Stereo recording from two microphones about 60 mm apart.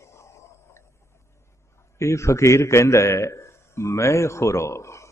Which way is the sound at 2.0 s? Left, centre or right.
Left.